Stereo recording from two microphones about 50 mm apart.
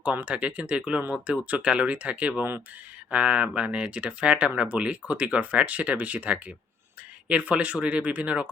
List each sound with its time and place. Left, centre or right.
0.0 s speech: right